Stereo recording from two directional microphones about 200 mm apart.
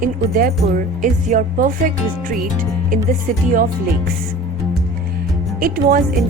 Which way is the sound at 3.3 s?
40° right (ahead or behind).